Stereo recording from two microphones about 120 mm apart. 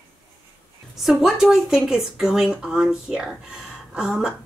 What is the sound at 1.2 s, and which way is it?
Speech, 5° right (ahead or behind).